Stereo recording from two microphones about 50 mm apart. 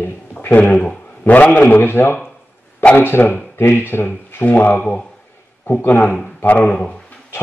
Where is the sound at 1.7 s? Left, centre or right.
Left.